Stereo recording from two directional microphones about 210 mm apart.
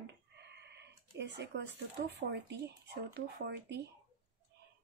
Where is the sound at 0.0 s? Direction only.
55° right (ahead or behind).